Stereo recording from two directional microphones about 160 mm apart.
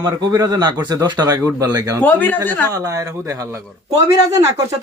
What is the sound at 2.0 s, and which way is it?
Speech, 10° left (ahead or behind).